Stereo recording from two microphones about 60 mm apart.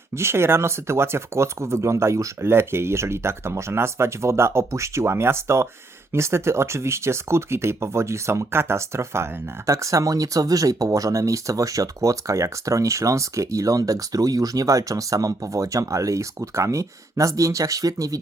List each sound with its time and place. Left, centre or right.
0.2 s speech: right